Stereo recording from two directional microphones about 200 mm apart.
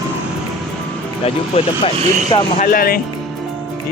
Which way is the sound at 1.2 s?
30° left (ahead or behind).